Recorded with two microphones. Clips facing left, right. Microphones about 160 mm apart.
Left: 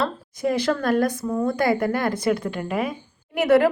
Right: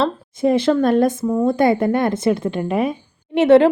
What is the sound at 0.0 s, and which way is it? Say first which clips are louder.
Speech: right 6 dB; 25° right (ahead or behind).